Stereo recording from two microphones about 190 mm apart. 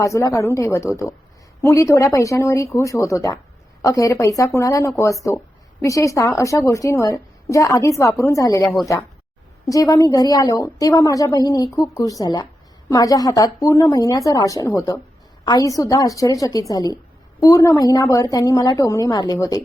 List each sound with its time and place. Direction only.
0.0 s a woman's voice: 15° left (ahead or behind)